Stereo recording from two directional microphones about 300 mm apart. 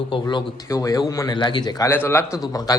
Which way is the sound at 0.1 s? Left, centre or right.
Centre.